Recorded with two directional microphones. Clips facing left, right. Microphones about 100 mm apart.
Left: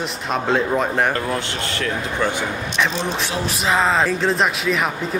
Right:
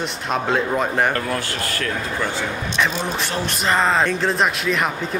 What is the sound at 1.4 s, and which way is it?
Speech, 25° left (ahead or behind).